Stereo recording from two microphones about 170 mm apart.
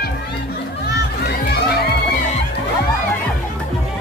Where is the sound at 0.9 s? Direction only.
70° left (ahead or behind).